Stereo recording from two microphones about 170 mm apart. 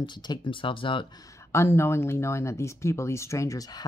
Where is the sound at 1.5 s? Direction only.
15° left (ahead or behind).